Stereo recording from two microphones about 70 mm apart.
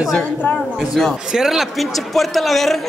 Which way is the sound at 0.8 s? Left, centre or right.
Centre.